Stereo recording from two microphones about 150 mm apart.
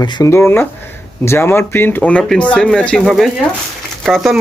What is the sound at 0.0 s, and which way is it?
Speech, 20° left (ahead or behind).